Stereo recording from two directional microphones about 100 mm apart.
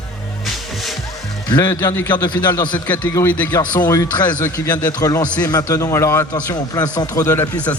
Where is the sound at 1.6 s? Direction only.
25° left (ahead or behind).